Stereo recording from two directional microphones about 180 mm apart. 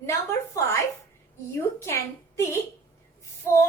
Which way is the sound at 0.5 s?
15° left (ahead or behind).